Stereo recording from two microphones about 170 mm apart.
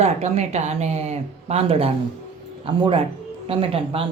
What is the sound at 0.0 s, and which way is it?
A man's voice, 40° right (ahead or behind).